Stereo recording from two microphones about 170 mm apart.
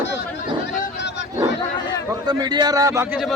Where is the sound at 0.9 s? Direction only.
90° left.